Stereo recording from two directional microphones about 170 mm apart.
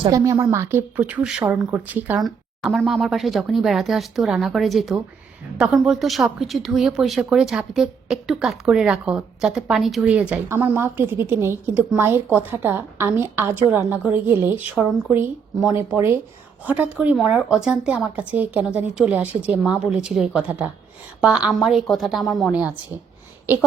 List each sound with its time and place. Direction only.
0.1 s a woman's voice: 20° right (ahead or behind)